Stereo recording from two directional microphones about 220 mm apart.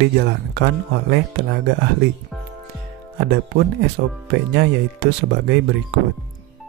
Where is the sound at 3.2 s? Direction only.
45° right (ahead or behind).